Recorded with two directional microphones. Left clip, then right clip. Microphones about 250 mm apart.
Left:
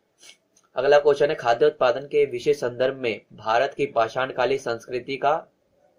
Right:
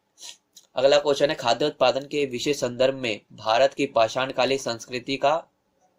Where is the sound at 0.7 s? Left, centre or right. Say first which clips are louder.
Left 2 dB; right.